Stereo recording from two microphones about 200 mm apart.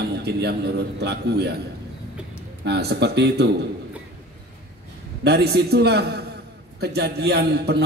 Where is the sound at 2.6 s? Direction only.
55° right (ahead or behind).